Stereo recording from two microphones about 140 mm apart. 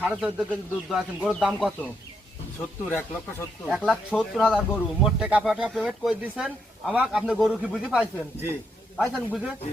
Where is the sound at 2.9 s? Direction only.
15° left (ahead or behind).